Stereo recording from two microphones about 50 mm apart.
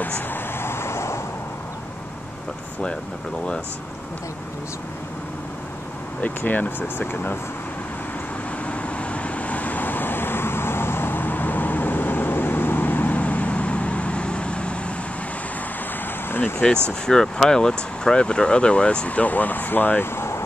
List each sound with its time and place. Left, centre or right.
0.3 s vehicle: left
6.2 s speech: left
8.6 s vehicle: left
16.3 s a sound: left
17.0 s speech: centre; by 20.1 s left
20.2 s vehicle: left